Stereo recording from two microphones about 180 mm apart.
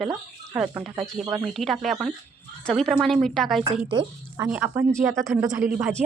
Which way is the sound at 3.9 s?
25° right (ahead or behind).